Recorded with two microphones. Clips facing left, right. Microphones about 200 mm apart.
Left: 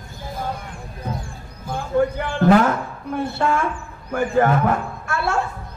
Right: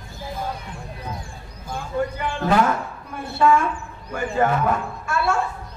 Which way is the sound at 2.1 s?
55° left (ahead or behind).